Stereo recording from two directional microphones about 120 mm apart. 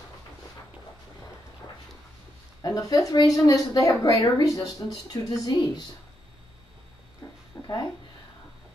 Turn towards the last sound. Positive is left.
turn(degrees=20)  # may be behind; listen again after turning